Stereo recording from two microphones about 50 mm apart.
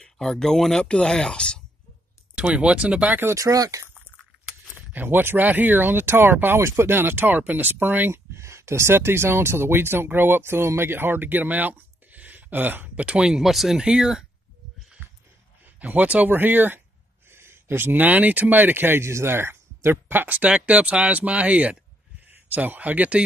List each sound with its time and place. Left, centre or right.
0.0 s speech: centre
2.3 s speech: right
3.3 s speech: right
4.9 s speech: right
8.1 s speech: right
13.0 s speech: right
13.3 s speech: centre
13.8 s speech: centre
15.6 s speech: right
17.3 s a sound: right
17.9 s speech: right
19.0 s speech: right
20.3 s speech: right